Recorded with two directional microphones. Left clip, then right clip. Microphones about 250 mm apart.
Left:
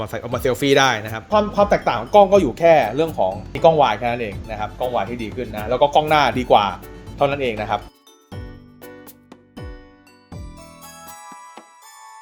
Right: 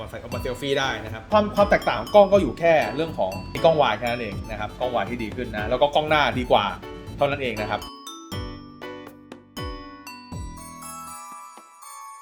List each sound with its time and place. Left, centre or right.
0.0 s speech: left
1.5 s speech: left